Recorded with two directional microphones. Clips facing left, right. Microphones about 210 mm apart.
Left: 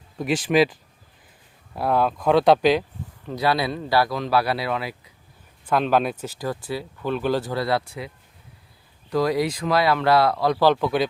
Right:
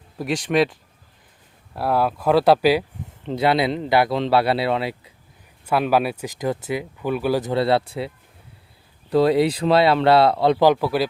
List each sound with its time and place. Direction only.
0.2 s speech: centre (ahead or behind)
3.2 s speech: 25° right (ahead or behind)
5.6 s speech: 10° right (ahead or behind)
7.4 s speech: 25° right (ahead or behind)
10.6 s speech: 10° right (ahead or behind)